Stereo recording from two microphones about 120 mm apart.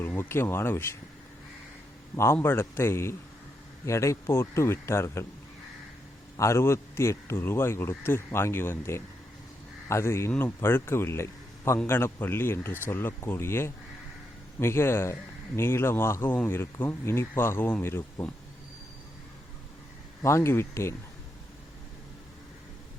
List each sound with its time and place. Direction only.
0.2 s speech: 20° left (ahead or behind)
2.1 s speech: 20° left (ahead or behind)
6.3 s speech: 25° left (ahead or behind)
20.2 s speech: 25° left (ahead or behind)